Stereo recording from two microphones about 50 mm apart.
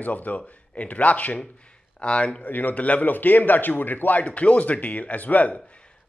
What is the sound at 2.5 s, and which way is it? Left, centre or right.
A man's voice, left.